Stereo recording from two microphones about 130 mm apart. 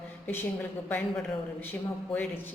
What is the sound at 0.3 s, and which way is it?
Speech, 15° left (ahead or behind).